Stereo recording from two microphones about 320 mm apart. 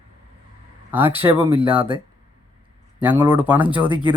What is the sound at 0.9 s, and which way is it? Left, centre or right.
Speech, centre.